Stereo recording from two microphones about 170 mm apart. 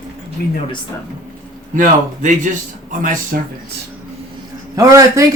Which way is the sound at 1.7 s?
50° right (ahead or behind).